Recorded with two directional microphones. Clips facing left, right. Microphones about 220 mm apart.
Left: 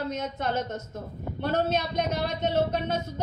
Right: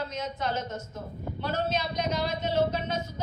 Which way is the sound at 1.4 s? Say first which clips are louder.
Left 4 dB; 55° left (ahead or behind).